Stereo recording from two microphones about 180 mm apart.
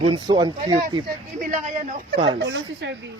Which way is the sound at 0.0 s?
25° right (ahead or behind).